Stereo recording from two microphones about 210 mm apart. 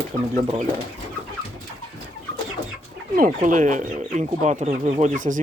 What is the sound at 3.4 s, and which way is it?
Speech, 35° right (ahead or behind).